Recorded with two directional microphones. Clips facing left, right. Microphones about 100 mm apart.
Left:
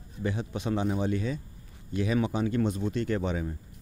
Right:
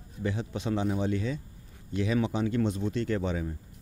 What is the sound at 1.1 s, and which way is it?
Speech, 45° left (ahead or behind).